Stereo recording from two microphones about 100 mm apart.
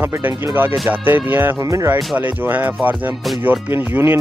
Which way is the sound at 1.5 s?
35° right (ahead or behind).